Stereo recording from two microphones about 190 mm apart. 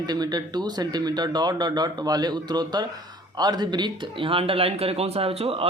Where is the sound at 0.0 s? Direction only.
20° right (ahead or behind).